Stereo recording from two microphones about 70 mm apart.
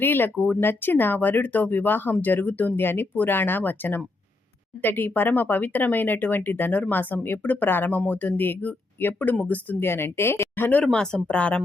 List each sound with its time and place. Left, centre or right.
0.0 s speech: left
9.8 s speech: left
10.9 s speech: centre